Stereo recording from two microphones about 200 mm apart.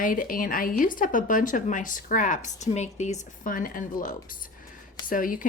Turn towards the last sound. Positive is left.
turn(degrees=45)  # may be behind; listen again after turning